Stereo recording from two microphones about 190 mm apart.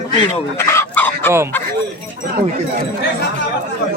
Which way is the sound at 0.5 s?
15° left (ahead or behind).